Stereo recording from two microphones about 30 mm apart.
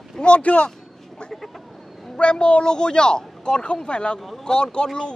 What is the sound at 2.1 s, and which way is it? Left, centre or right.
Speech, left.